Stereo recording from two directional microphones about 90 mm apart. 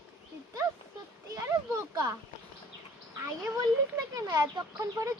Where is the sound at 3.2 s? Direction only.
35° right (ahead or behind).